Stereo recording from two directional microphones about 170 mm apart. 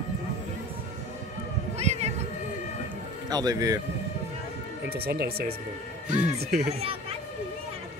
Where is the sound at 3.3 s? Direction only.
20° right (ahead or behind).